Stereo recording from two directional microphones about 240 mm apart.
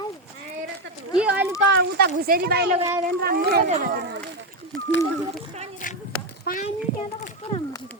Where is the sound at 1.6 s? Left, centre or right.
Right.